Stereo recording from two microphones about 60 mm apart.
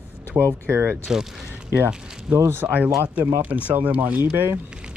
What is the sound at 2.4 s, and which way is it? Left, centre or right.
Speech, right.